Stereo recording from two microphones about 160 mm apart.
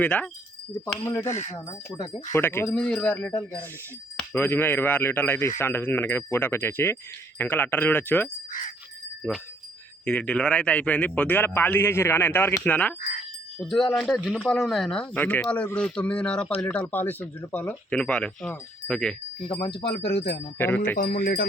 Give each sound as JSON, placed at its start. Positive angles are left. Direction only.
{"t": 0.0, "sound": "speech", "side_deg": 10}
{"t": 1.2, "sound": "speech", "side_deg": 45}
{"t": 1.5, "sound": "speech", "side_deg": 25}
{"t": 4.4, "sound": "speech", "side_deg": 15}
{"t": 19.6, "sound": "speech", "side_deg": 30}
{"t": 20.1, "sound": "speech", "side_deg": 90}
{"t": 20.6, "sound": "speech", "side_deg": 10}
{"t": 20.9, "sound": "speech", "side_deg": 65}